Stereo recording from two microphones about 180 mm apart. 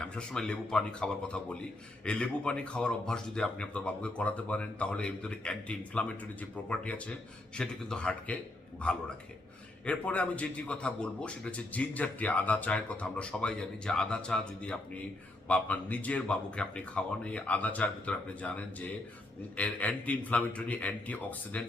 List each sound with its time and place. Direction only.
0.0 s a man's voice: 5° left (ahead or behind)